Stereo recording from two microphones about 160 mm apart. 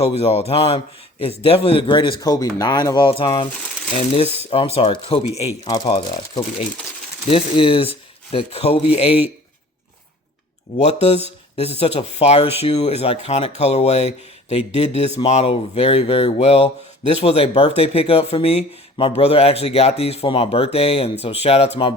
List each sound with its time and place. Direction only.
0.0 s speech: 40° left (ahead or behind)
5.6 s speech: 25° left (ahead or behind)
11.5 s speech: 40° left (ahead or behind)